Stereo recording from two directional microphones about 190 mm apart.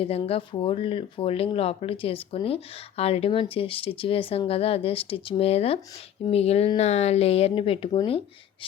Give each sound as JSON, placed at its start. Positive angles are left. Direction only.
{"t": 0.0, "sound": "speech", "side_deg": 30}